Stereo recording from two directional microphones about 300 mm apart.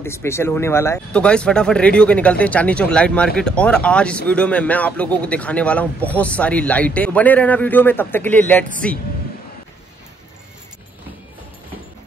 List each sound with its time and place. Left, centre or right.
0.0 s speech: centre